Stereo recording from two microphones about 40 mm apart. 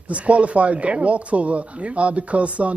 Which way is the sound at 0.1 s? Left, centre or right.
Right.